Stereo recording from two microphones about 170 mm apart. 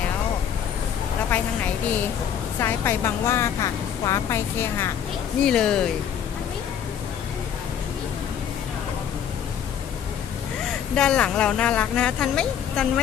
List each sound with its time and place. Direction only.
2.6 s a woman's voice: 15° left (ahead or behind)
5.5 s speech: 5° left (ahead or behind)
10.9 s speech: 5° left (ahead or behind)